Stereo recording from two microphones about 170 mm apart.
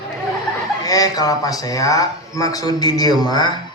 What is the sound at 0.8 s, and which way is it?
Speech, 20° left (ahead or behind).